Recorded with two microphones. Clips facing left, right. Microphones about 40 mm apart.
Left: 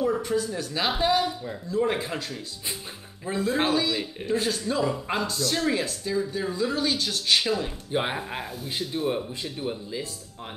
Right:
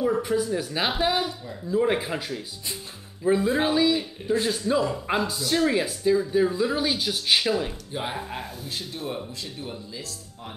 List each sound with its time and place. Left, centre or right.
0.0 s speech: centre
7.9 s speech: left
8.2 s speech: centre
8.6 s speech: centre